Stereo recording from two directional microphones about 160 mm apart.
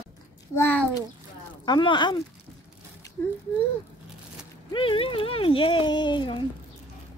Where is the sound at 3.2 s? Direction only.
15° left (ahead or behind).